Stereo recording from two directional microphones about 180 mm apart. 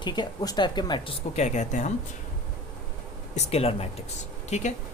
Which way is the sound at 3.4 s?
35° left (ahead or behind).